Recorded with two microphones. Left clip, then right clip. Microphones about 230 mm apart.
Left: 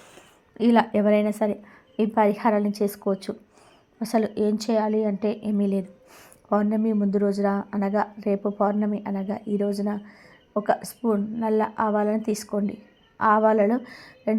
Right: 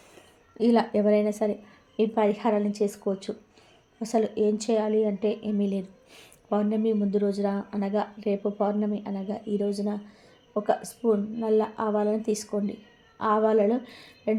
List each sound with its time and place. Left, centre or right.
0.2 s a woman's voice: centre